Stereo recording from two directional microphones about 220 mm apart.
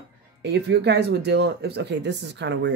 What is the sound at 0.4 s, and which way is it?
Speech, 50° right (ahead or behind).